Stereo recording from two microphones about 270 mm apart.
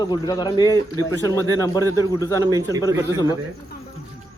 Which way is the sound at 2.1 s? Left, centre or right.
Centre.